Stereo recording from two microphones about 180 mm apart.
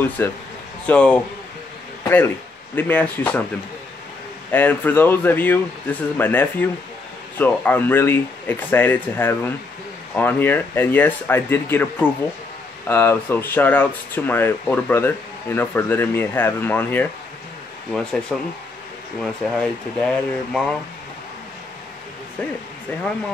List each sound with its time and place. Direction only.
0.2 s speech: 10° left (ahead or behind)
4.5 s speech: 10° left (ahead or behind)
18.3 s speech: 5° left (ahead or behind)